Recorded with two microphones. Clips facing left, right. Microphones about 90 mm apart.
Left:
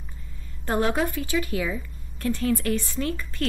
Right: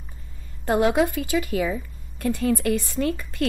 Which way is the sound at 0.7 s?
15° right (ahead or behind).